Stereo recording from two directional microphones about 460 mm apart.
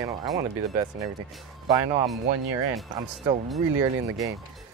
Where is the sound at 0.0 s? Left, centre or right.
Centre.